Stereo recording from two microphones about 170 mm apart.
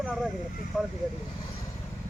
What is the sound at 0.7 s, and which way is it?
Vehicle, 5° right (ahead or behind).